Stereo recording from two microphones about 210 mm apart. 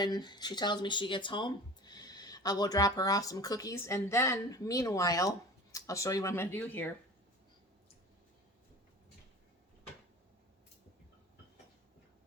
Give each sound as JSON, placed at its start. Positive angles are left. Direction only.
{"t": 0.0, "sound": "speech", "side_deg": 20}